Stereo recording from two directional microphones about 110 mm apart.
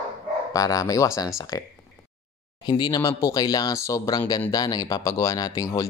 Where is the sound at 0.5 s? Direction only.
30° left (ahead or behind).